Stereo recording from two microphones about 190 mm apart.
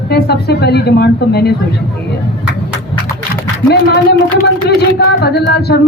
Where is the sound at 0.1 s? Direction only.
60° left (ahead or behind).